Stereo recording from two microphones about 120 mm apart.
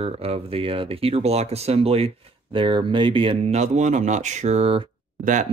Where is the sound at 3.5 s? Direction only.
75° right (ahead or behind); by 4.8 s 55° right (ahead or behind).